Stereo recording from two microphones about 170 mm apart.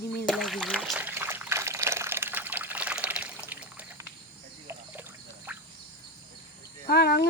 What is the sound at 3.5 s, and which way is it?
Trickle, 10° right (ahead or behind).